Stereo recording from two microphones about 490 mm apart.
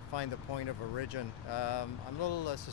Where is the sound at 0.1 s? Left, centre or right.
Left.